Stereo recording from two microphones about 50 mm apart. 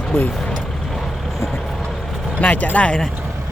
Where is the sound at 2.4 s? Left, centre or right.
Left.